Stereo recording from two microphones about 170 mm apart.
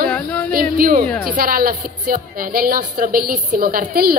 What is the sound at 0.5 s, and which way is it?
A woman's voice, 60° right (ahead or behind).